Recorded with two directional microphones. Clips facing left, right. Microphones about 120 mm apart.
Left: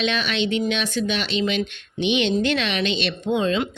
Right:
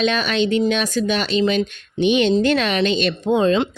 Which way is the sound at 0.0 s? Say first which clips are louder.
Right 4 dB; 40° right (ahead or behind).